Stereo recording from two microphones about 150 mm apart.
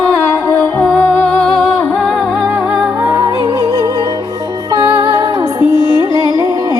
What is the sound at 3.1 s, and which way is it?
Music, 20° right (ahead or behind).